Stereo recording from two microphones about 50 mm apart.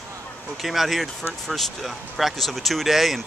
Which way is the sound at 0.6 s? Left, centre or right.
Centre.